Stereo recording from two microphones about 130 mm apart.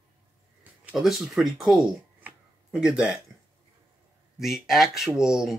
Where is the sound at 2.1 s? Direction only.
10° right (ahead or behind).